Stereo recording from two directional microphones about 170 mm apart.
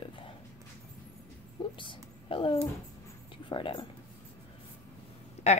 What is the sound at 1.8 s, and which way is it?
Speech, 30° left (ahead or behind).